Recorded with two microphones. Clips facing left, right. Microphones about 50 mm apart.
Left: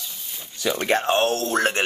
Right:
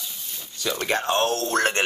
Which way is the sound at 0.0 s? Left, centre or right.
Centre.